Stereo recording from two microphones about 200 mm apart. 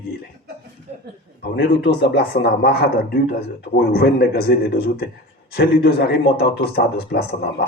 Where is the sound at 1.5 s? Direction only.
50° left (ahead or behind).